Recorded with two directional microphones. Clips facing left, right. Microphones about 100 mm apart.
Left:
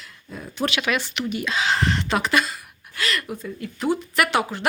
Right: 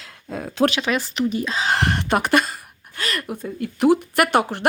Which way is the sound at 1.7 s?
55° right (ahead or behind).